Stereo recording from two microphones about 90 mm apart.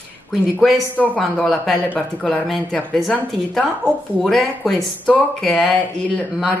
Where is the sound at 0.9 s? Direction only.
15° left (ahead or behind).